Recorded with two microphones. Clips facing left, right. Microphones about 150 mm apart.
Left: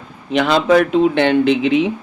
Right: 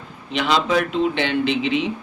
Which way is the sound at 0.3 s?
55° left (ahead or behind).